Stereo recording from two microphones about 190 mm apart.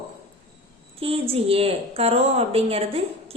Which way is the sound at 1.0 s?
30° right (ahead or behind).